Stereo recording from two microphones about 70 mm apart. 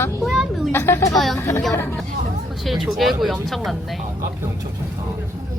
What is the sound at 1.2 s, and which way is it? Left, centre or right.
Speech, centre.